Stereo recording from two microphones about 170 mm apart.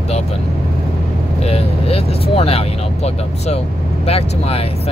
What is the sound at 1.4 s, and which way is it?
Speech, 35° left (ahead or behind).